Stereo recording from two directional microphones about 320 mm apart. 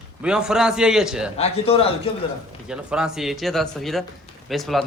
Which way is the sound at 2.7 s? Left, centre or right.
Centre.